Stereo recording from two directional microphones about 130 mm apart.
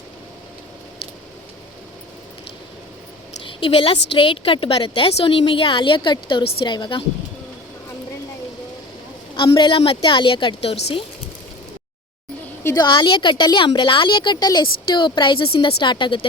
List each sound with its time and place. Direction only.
3.4 s a woman's voice: 45° left (ahead or behind)
9.3 s a woman's voice: 40° left (ahead or behind)
12.7 s a woman's voice: 35° left (ahead or behind)